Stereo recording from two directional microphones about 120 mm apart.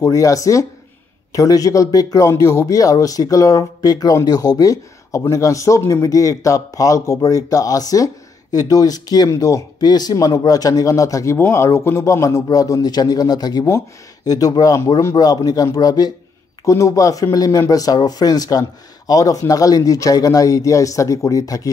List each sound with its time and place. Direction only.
0.0 s speech: 25° left (ahead or behind)